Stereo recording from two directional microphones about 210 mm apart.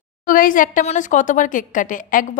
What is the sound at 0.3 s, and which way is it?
A woman's voice, 40° left (ahead or behind).